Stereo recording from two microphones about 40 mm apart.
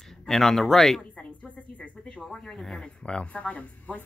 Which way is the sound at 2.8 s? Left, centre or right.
Left.